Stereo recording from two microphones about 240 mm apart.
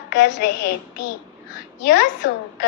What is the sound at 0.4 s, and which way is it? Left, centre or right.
Speech, left.